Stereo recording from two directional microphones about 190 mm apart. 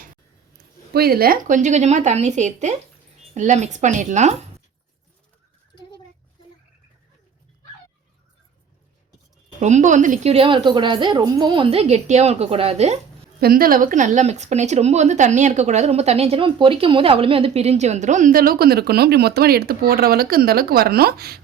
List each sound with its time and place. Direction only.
0.9 s speech: 55° right (ahead or behind); by 4.4 s 40° right (ahead or behind)
9.6 s speech: 40° right (ahead or behind)
13.4 s speech: 50° right (ahead or behind)